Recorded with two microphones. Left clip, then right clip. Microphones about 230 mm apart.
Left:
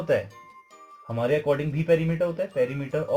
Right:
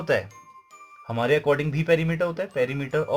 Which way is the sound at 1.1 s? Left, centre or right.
Right.